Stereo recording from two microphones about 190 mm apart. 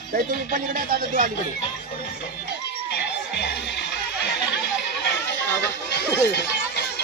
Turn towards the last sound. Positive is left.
turn(degrees=60)  # may be behind; listen again after turning